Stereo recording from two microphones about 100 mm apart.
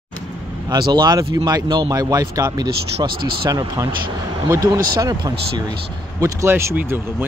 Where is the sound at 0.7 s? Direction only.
45° right (ahead or behind).